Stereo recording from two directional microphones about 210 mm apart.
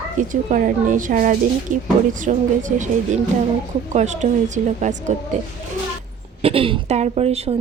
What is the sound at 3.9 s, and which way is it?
Speech, 35° right (ahead or behind).